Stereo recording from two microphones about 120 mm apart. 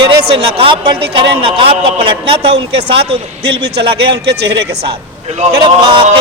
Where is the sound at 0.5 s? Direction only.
45° right (ahead or behind).